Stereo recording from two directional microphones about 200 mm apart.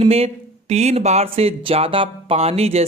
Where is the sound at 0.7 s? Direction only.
35° right (ahead or behind).